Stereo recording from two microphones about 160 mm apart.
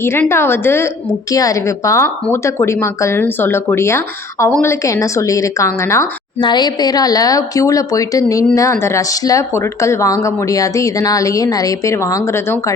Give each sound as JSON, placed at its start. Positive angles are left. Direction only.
{"t": 0.0, "sound": "speech", "side_deg": 15}